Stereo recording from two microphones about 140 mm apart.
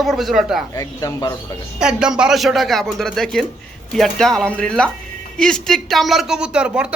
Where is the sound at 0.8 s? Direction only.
25° left (ahead or behind).